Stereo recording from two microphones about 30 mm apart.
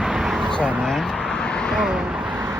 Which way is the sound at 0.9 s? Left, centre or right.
Centre.